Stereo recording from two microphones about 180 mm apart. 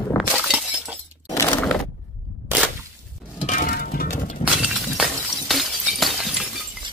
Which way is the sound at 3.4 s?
45° left (ahead or behind).